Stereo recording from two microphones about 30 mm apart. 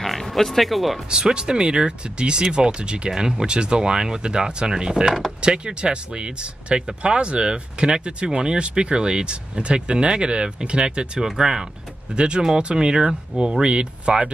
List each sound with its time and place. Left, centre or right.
0.0 s speech: centre
1.1 s speech: right
3.1 s speech: centre
3.4 s speech: right
11.1 s speech: right
12.2 s speech: right